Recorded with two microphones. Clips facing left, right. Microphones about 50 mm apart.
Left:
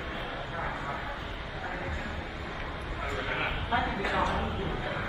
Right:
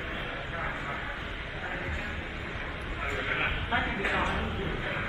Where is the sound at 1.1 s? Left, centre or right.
Right.